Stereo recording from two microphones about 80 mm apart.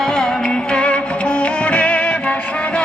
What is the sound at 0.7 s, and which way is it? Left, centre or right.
Music, centre.